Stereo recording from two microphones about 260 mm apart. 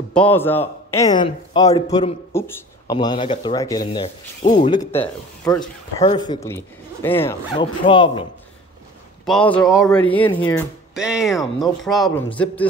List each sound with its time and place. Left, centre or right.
0.1 s a man's voice: centre
4.4 s a man's voice: left
5.5 s speech: centre
6.0 s a man's voice: centre
9.2 s speech: centre